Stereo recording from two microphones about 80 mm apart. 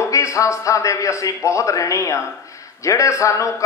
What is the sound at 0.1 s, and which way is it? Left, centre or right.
Speech, left.